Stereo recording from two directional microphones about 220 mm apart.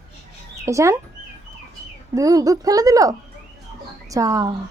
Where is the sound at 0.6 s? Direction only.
15° right (ahead or behind).